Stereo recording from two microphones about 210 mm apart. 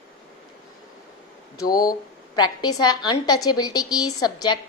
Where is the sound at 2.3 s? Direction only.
20° left (ahead or behind).